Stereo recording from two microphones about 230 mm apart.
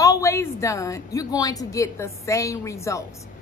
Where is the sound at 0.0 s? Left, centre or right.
Centre.